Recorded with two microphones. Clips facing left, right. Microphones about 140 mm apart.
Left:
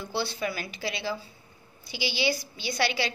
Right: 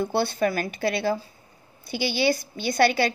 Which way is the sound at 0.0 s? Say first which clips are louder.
Right 7 dB; 55° right (ahead or behind).